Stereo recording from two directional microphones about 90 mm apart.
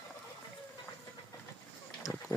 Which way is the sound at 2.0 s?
35° left (ahead or behind).